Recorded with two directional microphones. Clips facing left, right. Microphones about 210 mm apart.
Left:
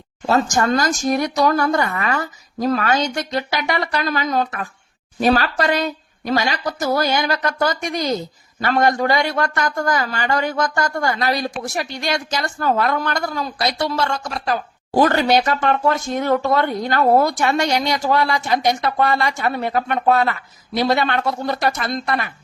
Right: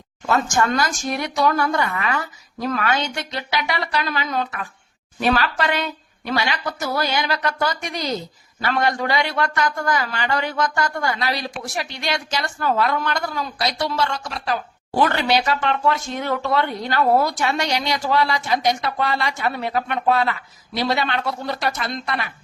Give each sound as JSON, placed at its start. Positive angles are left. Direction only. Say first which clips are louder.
{"t": 0.3, "sound": "a man's voice", "louder": "left 3 dB", "side_deg": 35}